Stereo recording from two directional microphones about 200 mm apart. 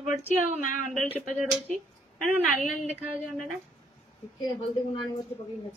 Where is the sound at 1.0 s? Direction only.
5° right (ahead or behind).